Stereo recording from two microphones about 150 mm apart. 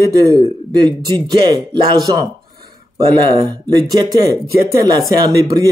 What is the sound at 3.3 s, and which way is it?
A man's voice, 30° right (ahead or behind).